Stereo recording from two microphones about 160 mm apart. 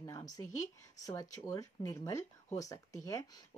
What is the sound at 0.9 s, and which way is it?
A woman's voice, 20° left (ahead or behind).